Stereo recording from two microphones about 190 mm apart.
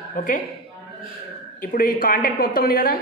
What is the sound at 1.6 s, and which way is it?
A woman's voice, 45° left (ahead or behind).